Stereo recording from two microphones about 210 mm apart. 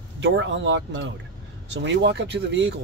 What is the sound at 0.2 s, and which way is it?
Speech, 60° right (ahead or behind).